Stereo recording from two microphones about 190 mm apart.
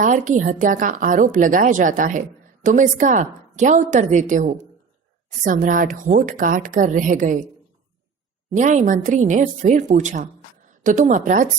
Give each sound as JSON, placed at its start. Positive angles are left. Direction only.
{"t": 0.0, "sound": "a woman's voice", "side_deg": -40}
{"t": 8.4, "sound": "a woman's voice", "side_deg": -40}